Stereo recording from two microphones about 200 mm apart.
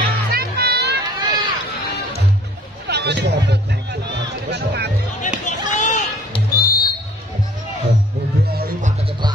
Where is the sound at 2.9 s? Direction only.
55° right (ahead or behind).